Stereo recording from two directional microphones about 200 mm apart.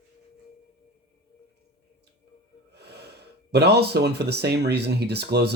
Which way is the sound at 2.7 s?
55° right (ahead or behind).